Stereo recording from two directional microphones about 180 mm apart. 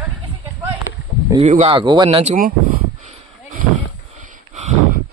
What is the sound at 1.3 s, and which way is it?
Speech, 40° right (ahead or behind).